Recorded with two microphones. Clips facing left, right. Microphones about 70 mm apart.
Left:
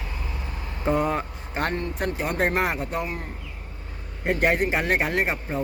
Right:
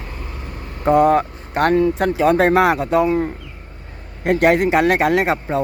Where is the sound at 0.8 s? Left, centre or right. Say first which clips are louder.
Right 10 dB; right.